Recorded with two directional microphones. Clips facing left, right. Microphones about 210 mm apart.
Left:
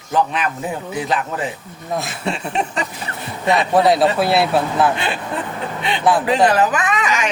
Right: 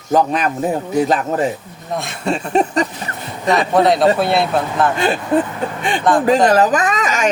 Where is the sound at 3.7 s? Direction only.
5° left (ahead or behind).